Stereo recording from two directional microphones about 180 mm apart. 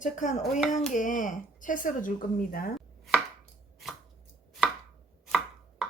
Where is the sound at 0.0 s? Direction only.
45° left (ahead or behind).